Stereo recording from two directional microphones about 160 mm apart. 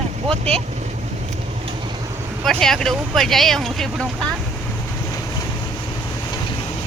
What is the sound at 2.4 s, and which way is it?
Speech, 5° left (ahead or behind).